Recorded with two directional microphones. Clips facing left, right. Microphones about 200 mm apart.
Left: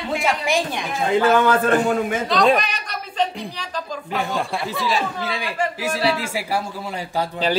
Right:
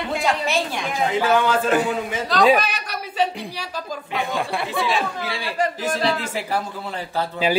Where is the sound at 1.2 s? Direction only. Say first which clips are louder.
Left 2 dB; 55° left (ahead or behind).